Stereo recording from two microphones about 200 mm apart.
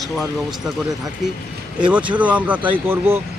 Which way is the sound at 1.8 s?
5° right (ahead or behind).